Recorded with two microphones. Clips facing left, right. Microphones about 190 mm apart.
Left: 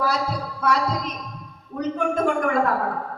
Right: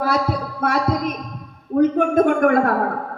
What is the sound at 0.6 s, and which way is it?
Speech, 55° right (ahead or behind).